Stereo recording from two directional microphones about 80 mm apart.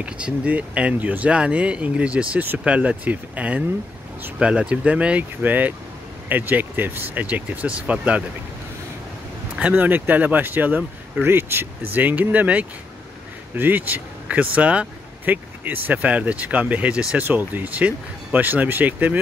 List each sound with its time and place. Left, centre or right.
0.0 s speech: centre
9.6 s speech: centre